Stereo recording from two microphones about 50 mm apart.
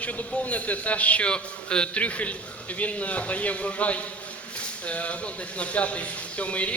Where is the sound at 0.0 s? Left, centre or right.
Left.